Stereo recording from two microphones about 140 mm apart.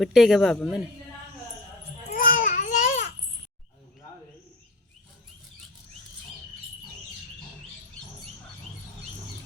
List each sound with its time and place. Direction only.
0.0 s speech: centre (ahead or behind)
2.0 s baby cry: 80° left; by 3.0 s 65° left (ahead or behind)